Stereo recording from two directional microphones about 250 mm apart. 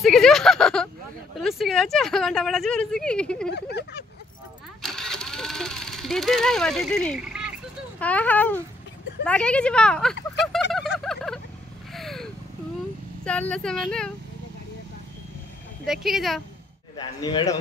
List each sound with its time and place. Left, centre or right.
0.0 s speech: centre
3.4 s a sound: left
4.8 s vehicle: centre
8.0 s speech: centre
10.7 s a sound: centre
13.2 s speech: centre
15.8 s speech: centre
16.9 s speech: centre